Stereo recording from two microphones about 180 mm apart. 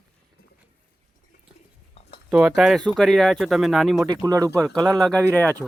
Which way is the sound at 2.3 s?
5° right (ahead or behind).